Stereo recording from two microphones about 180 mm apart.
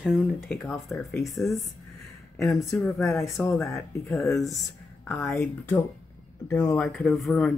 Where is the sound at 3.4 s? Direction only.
10° left (ahead or behind).